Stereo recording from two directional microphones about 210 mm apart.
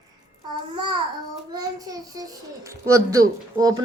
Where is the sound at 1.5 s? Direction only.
15° right (ahead or behind).